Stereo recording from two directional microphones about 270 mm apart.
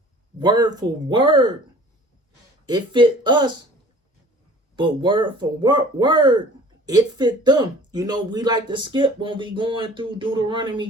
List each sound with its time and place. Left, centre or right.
0.3 s speech: centre
2.6 s speech: centre
4.8 s speech: centre